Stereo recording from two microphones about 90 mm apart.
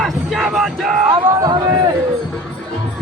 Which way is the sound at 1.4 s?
45° right (ahead or behind).